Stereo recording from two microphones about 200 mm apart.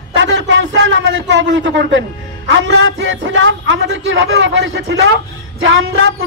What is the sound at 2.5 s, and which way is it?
Speech, 65° right (ahead or behind).